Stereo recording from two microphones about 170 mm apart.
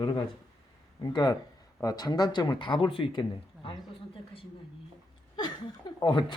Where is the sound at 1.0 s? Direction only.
25° left (ahead or behind).